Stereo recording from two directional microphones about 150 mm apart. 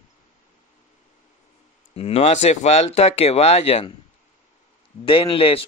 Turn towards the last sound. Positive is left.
turn(degrees=35)  # may be behind; listen again after turning